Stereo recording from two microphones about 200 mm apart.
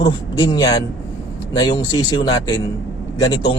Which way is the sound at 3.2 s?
20° left (ahead or behind).